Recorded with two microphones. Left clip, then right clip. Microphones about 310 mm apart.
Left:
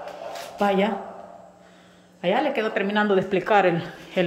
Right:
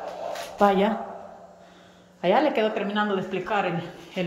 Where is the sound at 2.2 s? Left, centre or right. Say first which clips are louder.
Right 1 dB; centre.